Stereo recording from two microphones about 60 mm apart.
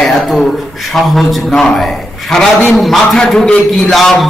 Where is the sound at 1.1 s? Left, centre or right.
Centre.